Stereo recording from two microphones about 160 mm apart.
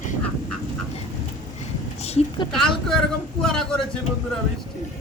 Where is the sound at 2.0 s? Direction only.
40° left (ahead or behind).